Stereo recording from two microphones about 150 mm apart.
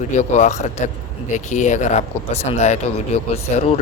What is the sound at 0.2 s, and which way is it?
Speech, 50° left (ahead or behind).